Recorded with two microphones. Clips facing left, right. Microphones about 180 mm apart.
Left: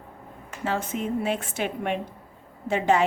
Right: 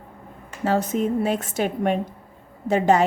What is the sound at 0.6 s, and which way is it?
A woman's voice, 40° right (ahead or behind).